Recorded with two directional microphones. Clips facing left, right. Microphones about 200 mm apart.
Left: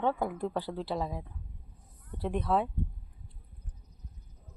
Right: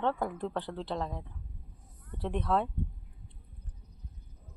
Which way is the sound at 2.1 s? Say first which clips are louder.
Left 1 dB; 5° left (ahead or behind).